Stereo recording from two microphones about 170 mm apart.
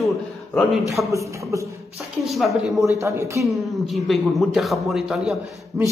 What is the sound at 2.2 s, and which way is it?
Speech, centre (ahead or behind).